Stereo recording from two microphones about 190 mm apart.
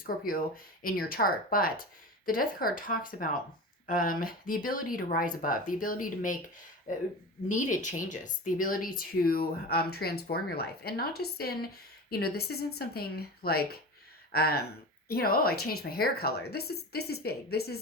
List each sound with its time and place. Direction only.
0.0 s speech: 50° left (ahead or behind)
7.4 s a woman's voice: 40° left (ahead or behind); by 17.7 s 55° left (ahead or behind)